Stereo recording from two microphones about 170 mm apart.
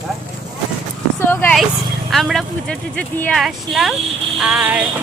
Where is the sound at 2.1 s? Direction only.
Centre (ahead or behind).